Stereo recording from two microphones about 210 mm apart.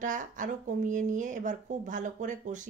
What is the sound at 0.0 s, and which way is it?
Speech, 40° right (ahead or behind).